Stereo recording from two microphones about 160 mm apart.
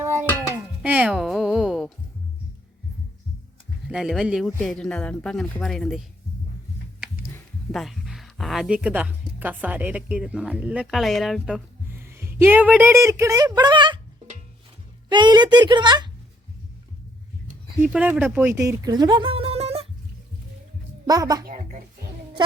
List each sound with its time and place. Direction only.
0.0 s music: 15° right (ahead or behind)
3.8 s speech: 5° right (ahead or behind)
7.7 s speech: centre (ahead or behind)
11.9 s speech: 15° right (ahead or behind)
15.1 s speech: 30° right (ahead or behind)
17.8 s speech: 10° right (ahead or behind); by 19.9 s 40° right (ahead or behind)
21.1 s speech: 25° right (ahead or behind)
21.4 s music: 55° right (ahead or behind)